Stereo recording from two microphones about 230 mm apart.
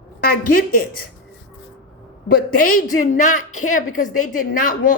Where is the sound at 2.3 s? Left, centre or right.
Left.